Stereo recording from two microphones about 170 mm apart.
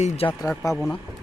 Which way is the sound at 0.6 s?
20° left (ahead or behind).